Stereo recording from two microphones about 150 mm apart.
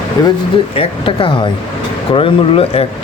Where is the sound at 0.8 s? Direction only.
35° left (ahead or behind).